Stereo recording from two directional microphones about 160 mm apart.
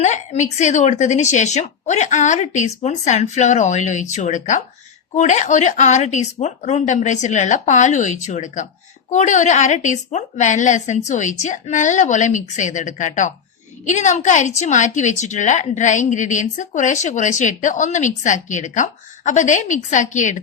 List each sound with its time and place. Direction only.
0.0 s a woman's voice: 45° left (ahead or behind)